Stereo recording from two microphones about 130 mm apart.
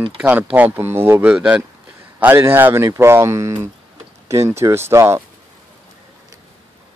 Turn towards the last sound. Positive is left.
turn(degrees=-20)  # may be behind; listen again after turning